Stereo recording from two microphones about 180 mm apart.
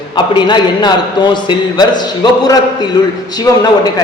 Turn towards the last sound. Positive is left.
turn(degrees=20)  # may be behind; listen again after turning